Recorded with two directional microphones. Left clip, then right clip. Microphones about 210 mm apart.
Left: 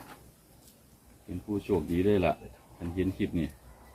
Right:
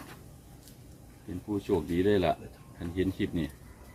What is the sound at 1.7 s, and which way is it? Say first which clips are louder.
Speech: even; 15° right (ahead or behind).